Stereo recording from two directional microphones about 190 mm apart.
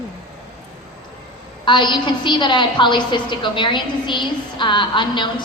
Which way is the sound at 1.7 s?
25° left (ahead or behind).